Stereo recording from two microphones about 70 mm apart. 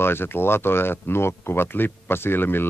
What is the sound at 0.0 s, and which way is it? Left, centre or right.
Speech, left.